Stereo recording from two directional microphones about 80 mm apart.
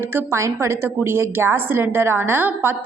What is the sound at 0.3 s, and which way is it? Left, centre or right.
A woman's voice, right.